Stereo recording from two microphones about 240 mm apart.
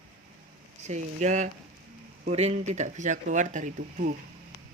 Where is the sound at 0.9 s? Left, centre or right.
Right.